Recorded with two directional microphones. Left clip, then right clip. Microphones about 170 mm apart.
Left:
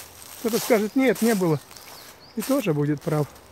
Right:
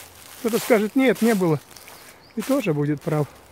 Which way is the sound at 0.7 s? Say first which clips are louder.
Right 2 dB; 30° right (ahead or behind).